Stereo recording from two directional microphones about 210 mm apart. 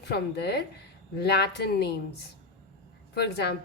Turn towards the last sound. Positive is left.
turn(degrees=50)  # may be behind; listen again after turning